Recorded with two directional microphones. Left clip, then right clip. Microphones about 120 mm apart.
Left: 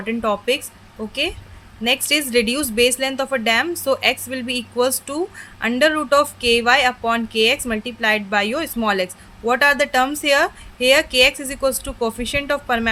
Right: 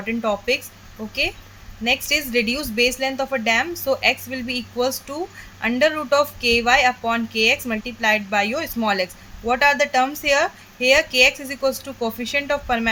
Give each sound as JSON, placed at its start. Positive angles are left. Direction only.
{"t": 0.0, "sound": "speech", "side_deg": 25}
{"t": 1.8, "sound": "a woman's voice", "side_deg": 35}